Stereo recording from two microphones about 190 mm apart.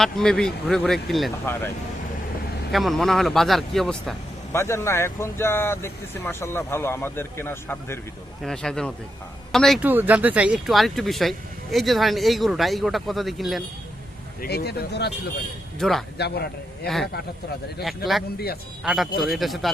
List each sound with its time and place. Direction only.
0.0 s speech: 5° left (ahead or behind)
2.7 s speech: centre (ahead or behind)
4.5 s speech: 15° left (ahead or behind)
9.8 s speech: 10° right (ahead or behind)
14.4 s speech: 60° left (ahead or behind)
15.8 s speech: centre (ahead or behind)
16.1 s speech: 60° left (ahead or behind)
16.8 s speech: 5° left (ahead or behind)